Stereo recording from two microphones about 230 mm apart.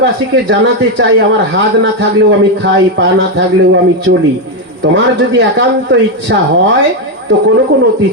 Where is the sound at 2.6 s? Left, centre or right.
Right.